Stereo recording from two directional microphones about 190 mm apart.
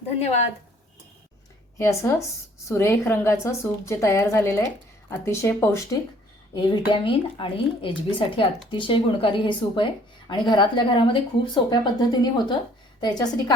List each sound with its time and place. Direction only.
0.2 s a woman's voice: 35° left (ahead or behind)
1.8 s a woman's voice: 15° left (ahead or behind)